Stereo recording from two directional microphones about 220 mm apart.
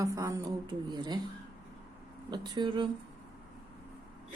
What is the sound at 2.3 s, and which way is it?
Speech, 20° right (ahead or behind).